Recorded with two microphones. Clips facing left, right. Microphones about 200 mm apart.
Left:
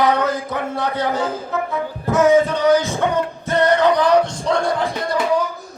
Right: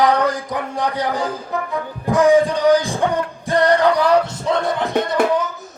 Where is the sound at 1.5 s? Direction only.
15° right (ahead or behind).